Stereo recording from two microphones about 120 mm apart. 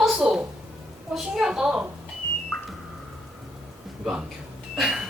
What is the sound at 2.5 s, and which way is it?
Car alarm, 20° left (ahead or behind).